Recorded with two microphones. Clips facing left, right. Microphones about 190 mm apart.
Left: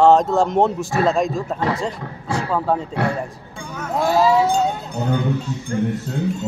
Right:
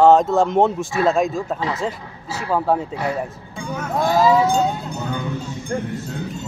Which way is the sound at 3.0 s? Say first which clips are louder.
Left 2 dB; 65° left (ahead or behind).